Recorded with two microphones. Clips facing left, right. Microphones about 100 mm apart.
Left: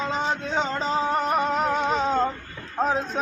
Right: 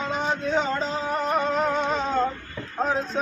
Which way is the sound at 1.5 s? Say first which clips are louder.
Left 1 dB; 10° left (ahead or behind).